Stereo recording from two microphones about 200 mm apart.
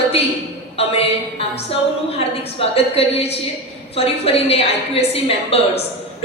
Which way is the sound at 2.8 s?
30° left (ahead or behind).